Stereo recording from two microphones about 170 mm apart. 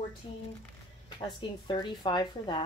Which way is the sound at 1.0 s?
30° left (ahead or behind).